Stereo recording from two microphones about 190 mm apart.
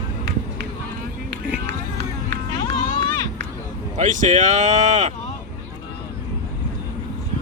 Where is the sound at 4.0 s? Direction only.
40° right (ahead or behind).